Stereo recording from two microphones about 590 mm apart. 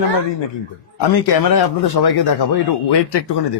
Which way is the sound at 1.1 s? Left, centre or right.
Left.